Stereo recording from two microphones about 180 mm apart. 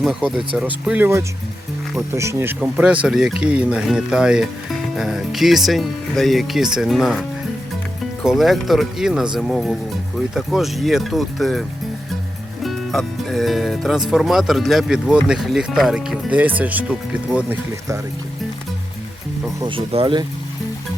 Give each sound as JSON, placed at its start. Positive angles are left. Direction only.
{"t": 0.0, "sound": "speech", "side_deg": -5}
{"t": 12.6, "sound": "speech", "side_deg": 0}
{"t": 19.6, "sound": "speech", "side_deg": -30}